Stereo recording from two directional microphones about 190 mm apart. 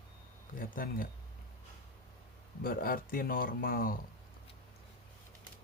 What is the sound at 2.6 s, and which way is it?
Speech, 50° left (ahead or behind).